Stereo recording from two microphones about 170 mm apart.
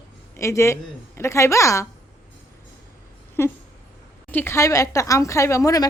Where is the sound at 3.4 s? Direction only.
15° left (ahead or behind).